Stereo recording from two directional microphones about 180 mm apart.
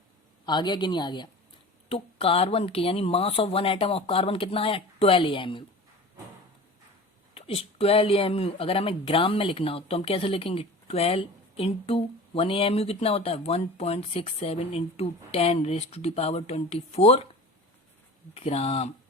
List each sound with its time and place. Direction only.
0.4 s speech: 25° left (ahead or behind)
7.3 s speech: 30° left (ahead or behind)
18.3 s speech: 35° left (ahead or behind)